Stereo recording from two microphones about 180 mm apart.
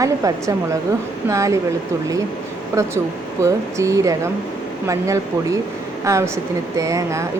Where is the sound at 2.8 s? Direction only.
15° right (ahead or behind).